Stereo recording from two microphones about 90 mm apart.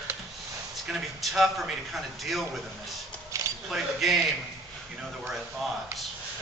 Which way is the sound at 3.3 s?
35° right (ahead or behind).